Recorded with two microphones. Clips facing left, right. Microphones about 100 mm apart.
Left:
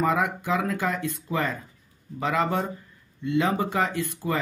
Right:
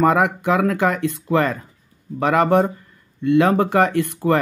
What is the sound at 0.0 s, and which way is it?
Speech, 65° right (ahead or behind).